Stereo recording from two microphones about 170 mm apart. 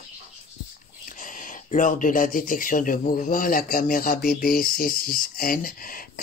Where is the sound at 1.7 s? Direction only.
50° left (ahead or behind).